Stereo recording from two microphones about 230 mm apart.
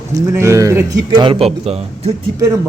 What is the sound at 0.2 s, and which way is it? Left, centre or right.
A man's voice, centre.